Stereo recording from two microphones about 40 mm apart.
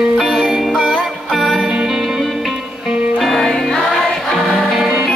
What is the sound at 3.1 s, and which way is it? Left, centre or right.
Music, centre.